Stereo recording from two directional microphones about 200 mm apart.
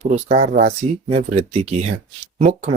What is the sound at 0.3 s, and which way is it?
Speech, 35° right (ahead or behind).